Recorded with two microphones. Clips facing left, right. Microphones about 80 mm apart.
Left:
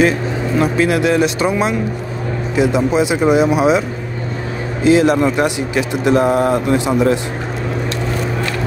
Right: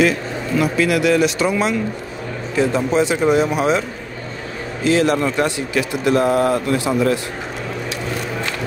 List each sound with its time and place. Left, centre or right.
0.6 s speech: left; by 3.8 s centre
4.8 s speech: centre